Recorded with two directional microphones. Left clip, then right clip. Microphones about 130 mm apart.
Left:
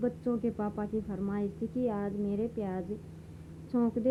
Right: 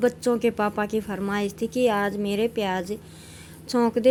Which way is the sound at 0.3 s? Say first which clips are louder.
Right 11 dB; 35° right (ahead or behind).